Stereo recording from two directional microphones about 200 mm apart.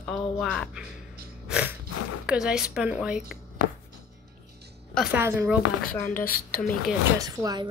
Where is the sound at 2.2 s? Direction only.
5° right (ahead or behind).